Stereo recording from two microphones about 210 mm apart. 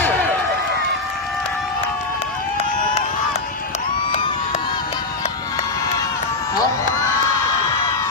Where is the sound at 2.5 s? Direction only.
30° left (ahead or behind).